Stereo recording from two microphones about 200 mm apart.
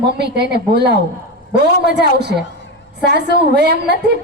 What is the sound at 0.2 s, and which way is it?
A woman's voice, 55° right (ahead or behind).